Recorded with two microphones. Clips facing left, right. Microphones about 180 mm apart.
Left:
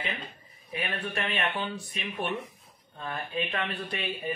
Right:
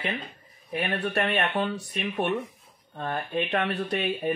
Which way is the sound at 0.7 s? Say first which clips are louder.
Right 5 dB; 65° right (ahead or behind).